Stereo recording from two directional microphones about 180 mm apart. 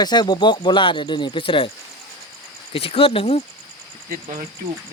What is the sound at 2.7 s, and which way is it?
Speech, 30° left (ahead or behind).